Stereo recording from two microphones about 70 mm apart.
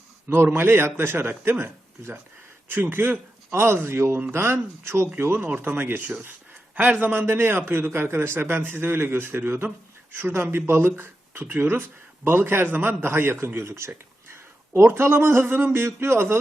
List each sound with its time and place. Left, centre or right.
0.4 s a man's voice: right